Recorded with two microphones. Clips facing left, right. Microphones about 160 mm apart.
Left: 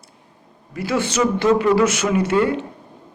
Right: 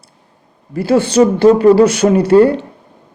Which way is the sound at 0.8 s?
30° right (ahead or behind).